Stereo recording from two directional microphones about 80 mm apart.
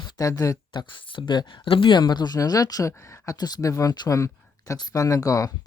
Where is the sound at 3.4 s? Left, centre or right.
Left.